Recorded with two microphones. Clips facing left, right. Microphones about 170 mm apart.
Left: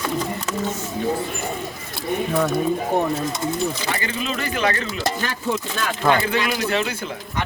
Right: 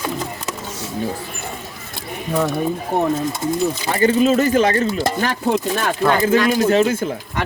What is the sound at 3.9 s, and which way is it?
Speech, 40° right (ahead or behind).